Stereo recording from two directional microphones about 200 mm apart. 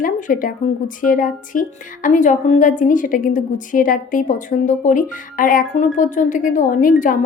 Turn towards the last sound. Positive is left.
turn(degrees=40)  # may be behind; listen again after turning